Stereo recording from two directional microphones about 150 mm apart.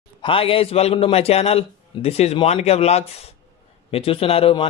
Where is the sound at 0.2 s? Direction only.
35° left (ahead or behind).